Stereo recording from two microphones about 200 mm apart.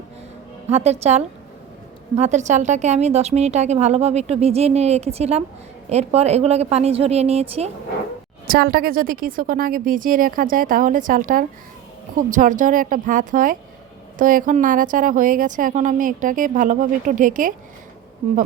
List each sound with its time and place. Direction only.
0.7 s a woman's voice: 35° right (ahead or behind)
8.4 s a woman's voice: 50° right (ahead or behind)